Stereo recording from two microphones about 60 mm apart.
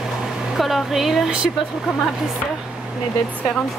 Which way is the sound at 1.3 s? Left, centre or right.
Centre.